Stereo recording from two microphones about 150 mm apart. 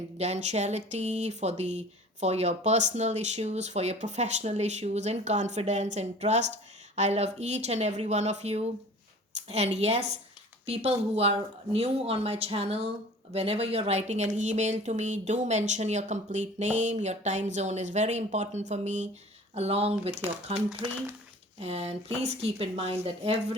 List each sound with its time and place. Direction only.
0.2 s speech: 50° right (ahead or behind)